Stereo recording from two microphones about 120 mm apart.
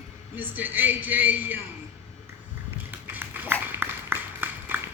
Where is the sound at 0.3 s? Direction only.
15° right (ahead or behind).